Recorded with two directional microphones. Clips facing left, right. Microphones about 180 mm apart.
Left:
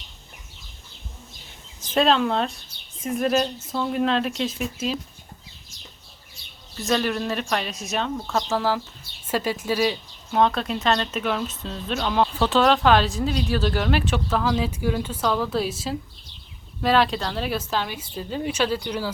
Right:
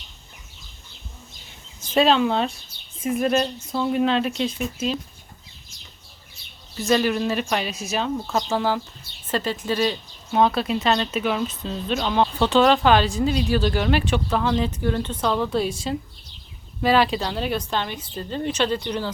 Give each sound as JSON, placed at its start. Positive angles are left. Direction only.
{"t": 1.9, "sound": "a woman's voice", "side_deg": 0}
{"t": 6.7, "sound": "a woman's voice", "side_deg": 0}
{"t": 10.3, "sound": "a woman's voice", "side_deg": -5}